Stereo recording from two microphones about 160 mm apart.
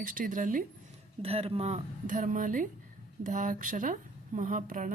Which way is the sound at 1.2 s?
40° right (ahead or behind).